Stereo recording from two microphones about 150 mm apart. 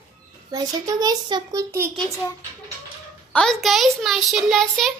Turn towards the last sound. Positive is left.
turn(degrees=0)  # may be behind; listen again after turning